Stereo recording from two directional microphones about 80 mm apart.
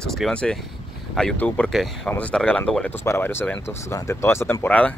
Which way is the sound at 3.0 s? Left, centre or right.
Left.